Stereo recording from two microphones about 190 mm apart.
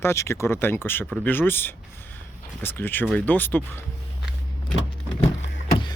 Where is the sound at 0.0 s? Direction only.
15° left (ahead or behind).